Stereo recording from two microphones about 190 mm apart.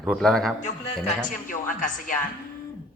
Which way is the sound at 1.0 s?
45° left (ahead or behind).